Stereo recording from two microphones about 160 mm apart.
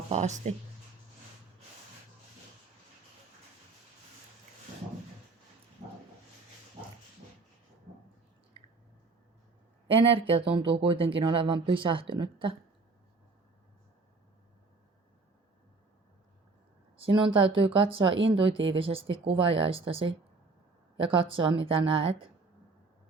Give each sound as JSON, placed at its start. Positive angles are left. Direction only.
{"t": 0.1, "sound": "speech", "side_deg": -45}
{"t": 5.8, "sound": "dog", "side_deg": -45}
{"t": 9.9, "sound": "speech", "side_deg": -35}
{"t": 17.0, "sound": "a woman's voice", "side_deg": -30}